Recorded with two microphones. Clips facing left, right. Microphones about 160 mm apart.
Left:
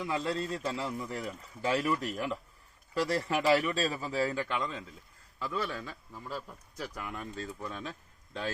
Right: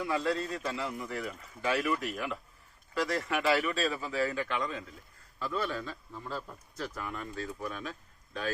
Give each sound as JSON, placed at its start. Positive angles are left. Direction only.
{"t": 0.1, "sound": "a man's voice", "side_deg": 25}
{"t": 4.4, "sound": "a man's voice", "side_deg": 20}